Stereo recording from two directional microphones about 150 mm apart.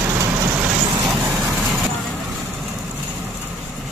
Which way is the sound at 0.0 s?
20° right (ahead or behind).